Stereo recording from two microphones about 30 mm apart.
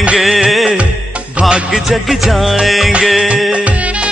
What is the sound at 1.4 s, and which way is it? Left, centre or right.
Music, centre.